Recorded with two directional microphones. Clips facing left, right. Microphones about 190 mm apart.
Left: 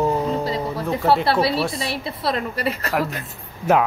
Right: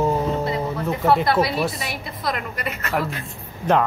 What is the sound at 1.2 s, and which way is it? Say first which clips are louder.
A woman's voice: even; 30° left (ahead or behind).